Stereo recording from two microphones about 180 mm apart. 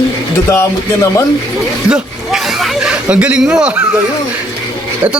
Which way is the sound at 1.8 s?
5° right (ahead or behind).